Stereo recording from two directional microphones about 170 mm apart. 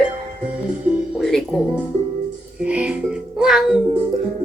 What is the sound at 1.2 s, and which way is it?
Music, centre (ahead or behind).